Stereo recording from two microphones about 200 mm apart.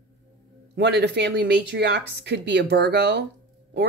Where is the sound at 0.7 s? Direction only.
60° right (ahead or behind).